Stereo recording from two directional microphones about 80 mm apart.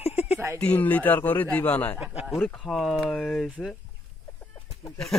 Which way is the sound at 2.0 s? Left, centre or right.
Centre.